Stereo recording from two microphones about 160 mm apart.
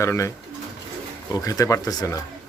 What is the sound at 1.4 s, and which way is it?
Speech, 20° left (ahead or behind).